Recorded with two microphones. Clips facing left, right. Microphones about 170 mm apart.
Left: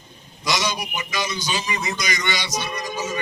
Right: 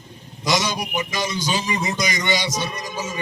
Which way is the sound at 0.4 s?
45° right (ahead or behind).